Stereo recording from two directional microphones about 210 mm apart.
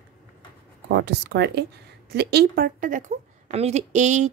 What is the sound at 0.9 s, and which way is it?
A woman's voice, 50° right (ahead or behind).